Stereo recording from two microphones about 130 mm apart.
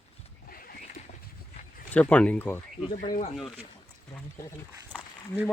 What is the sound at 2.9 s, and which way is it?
Speech, 90° left.